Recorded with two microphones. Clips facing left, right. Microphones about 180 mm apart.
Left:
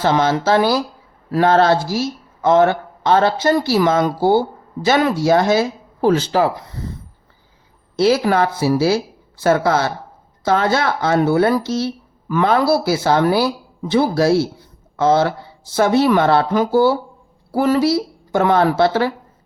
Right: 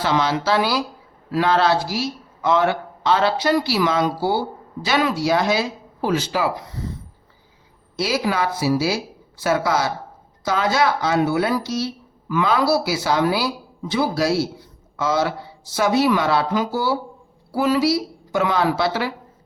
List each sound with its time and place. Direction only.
0.0 s speech: 50° left (ahead or behind)
7.9 s speech: 55° left (ahead or behind)